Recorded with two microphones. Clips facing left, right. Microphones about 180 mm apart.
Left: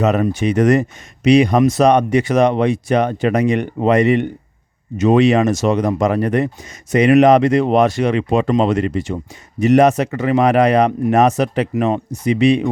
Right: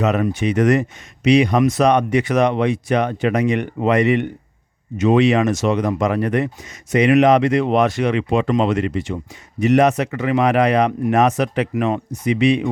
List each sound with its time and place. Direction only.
0.0 s speech: 40° left (ahead or behind)